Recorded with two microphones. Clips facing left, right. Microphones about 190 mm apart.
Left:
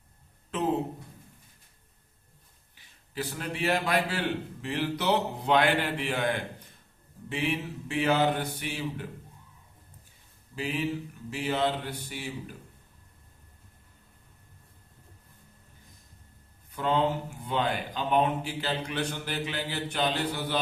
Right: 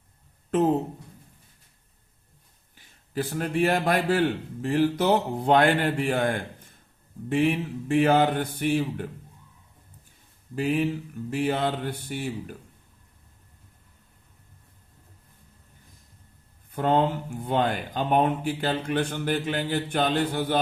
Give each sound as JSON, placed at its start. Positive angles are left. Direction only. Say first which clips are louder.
{"t": 2.7, "sound": "a man's voice", "louder": "right 6 dB", "side_deg": -45}
{"t": 10.5, "sound": "a man's voice", "louder": "right 6 dB", "side_deg": -50}
{"t": 16.7, "sound": "a man's voice", "louder": "right 4 dB", "side_deg": -50}